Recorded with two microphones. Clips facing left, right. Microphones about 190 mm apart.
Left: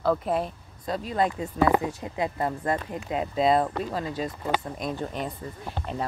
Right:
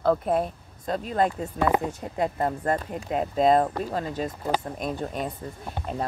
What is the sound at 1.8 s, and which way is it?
Speech, centre (ahead or behind).